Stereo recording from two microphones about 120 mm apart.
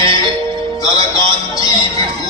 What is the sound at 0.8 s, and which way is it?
A man's voice, 30° left (ahead or behind).